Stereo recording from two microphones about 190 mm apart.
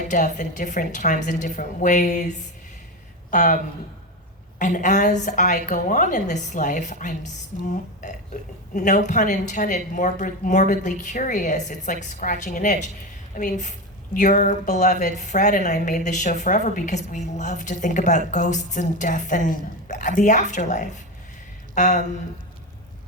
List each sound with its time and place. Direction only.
0.1 s speech: 40° left (ahead or behind)
4.6 s speech: 40° left (ahead or behind)